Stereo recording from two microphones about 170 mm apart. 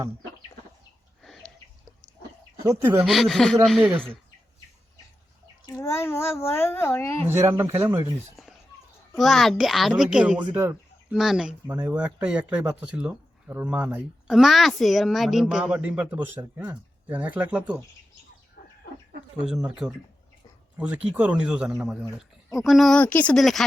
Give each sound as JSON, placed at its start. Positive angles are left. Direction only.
{"t": 1.2, "sound": "a sound", "side_deg": 0}
{"t": 3.1, "sound": "a child's voice", "side_deg": 0}
{"t": 5.6, "sound": "a child's voice", "side_deg": 15}
{"t": 7.3, "sound": "speech", "side_deg": -15}
{"t": 9.1, "sound": "a child's voice", "side_deg": 0}
{"t": 19.5, "sound": "a child's voice", "side_deg": -5}